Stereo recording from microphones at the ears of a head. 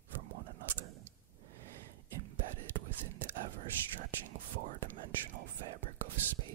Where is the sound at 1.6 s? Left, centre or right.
Right.